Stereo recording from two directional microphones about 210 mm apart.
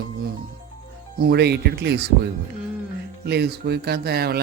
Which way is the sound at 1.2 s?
50° right (ahead or behind).